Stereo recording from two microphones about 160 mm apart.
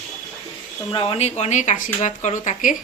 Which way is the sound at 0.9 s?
35° left (ahead or behind).